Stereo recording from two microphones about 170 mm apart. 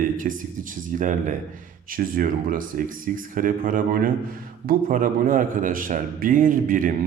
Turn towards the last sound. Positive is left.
turn(degrees=-55)  # may be behind; listen again after turning